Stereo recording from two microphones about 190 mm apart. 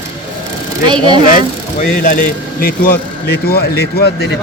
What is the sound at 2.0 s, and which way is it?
Speech, 50° left (ahead or behind).